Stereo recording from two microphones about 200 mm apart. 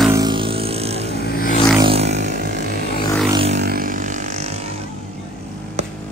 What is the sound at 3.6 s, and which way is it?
Vehicle, 45° right (ahead or behind).